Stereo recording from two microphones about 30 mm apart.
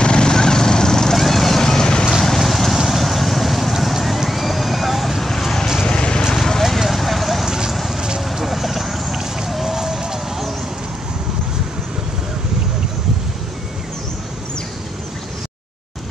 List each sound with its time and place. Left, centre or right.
0.0 s vehicle: left
1.1 s vehicle: centre
1.6 s vehicle: centre
2.0 s vehicle: centre
5.9 s vehicle: left
6.3 s clip-clop: centre
6.6 s a sound: centre
7.4 s vehicle: centre
7.7 s a sound: centre
8.4 s vehicle: centre
9.1 s a sound: centre